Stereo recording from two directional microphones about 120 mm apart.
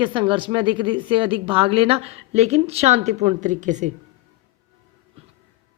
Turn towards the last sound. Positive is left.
turn(degrees=-90)